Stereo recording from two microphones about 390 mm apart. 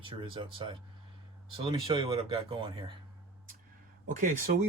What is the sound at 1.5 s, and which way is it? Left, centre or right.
Speech, centre.